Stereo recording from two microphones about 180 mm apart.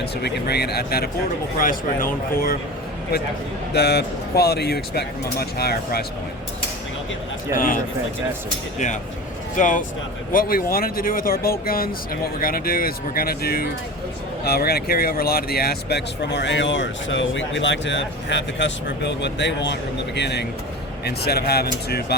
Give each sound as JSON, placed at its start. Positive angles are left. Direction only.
{"t": 0.2, "sound": "speech", "side_deg": 65}
{"t": 3.7, "sound": "speech", "side_deg": 65}
{"t": 7.5, "sound": "speech", "side_deg": 50}
{"t": 9.6, "sound": "speech", "side_deg": 45}